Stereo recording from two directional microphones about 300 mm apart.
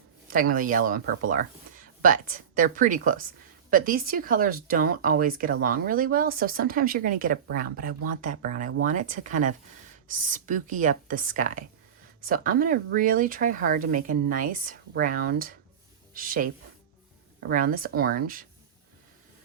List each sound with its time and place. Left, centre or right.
0.3 s a woman's voice: right
17.5 s speech: right